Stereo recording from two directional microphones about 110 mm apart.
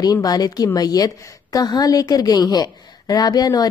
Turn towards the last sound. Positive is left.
turn(degrees=35)  # may be behind; listen again after turning